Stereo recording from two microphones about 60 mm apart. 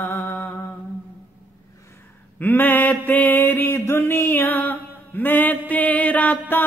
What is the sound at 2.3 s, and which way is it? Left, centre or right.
Mantra, left.